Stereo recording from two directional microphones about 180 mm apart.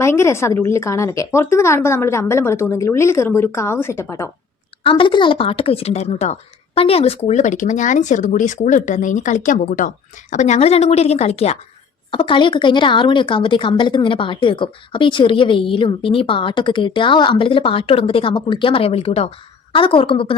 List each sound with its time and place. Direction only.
0.0 s speech: 15° left (ahead or behind)
4.8 s a woman's voice: 30° left (ahead or behind)